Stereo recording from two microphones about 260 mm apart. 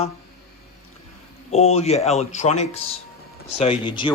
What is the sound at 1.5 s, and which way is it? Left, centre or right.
Speech, left.